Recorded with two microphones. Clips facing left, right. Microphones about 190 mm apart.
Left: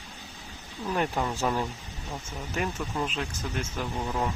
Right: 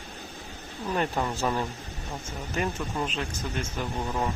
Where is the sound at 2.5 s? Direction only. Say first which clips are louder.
Right 1 dB; centre (ahead or behind).